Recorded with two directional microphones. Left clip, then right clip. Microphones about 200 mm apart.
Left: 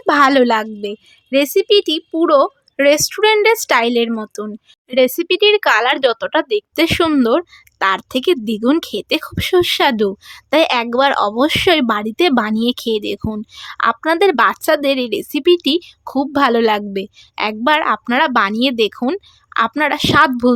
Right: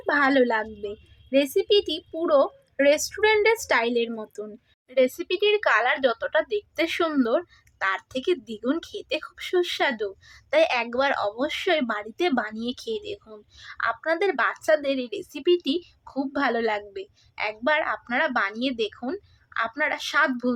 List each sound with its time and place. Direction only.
0.0 s speech: 45° left (ahead or behind)